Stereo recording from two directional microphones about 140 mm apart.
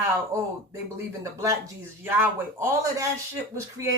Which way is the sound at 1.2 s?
20° right (ahead or behind).